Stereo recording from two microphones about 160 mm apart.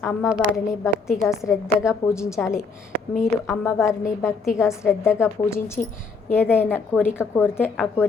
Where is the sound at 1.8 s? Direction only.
20° left (ahead or behind).